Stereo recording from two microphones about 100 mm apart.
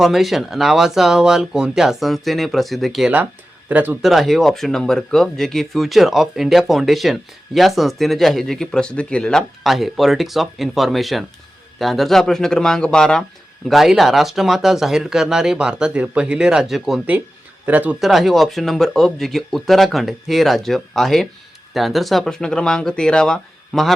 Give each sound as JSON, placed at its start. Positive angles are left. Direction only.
{"t": 0.0, "sound": "speech", "side_deg": 0}
{"t": 3.7, "sound": "speech", "side_deg": -15}
{"t": 4.0, "sound": "speech", "side_deg": 0}
{"t": 17.7, "sound": "speech", "side_deg": -20}
{"t": 18.0, "sound": "speech", "side_deg": 0}